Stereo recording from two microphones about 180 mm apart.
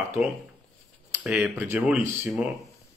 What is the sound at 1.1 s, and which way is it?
Speech, 10° right (ahead or behind).